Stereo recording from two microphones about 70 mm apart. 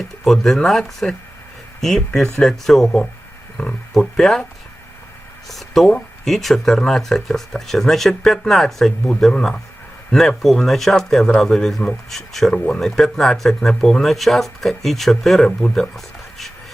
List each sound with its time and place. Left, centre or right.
0.3 s speech: centre
3.6 s speech: centre
3.9 s speech: centre
5.5 s speech: centre